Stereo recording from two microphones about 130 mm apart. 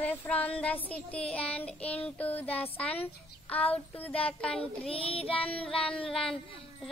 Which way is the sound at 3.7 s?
10° left (ahead or behind).